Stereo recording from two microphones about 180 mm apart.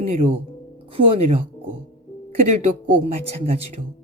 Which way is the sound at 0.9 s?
30° right (ahead or behind).